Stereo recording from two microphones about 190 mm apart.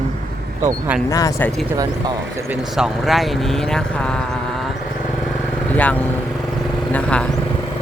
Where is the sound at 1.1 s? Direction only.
15° left (ahead or behind).